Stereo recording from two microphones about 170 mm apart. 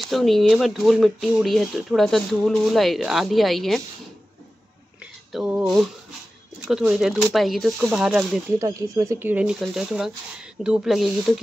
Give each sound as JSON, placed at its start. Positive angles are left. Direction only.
{"t": 0.0, "sound": "speech", "side_deg": 0}
{"t": 5.3, "sound": "speech", "side_deg": 0}
{"t": 8.5, "sound": "speech", "side_deg": -20}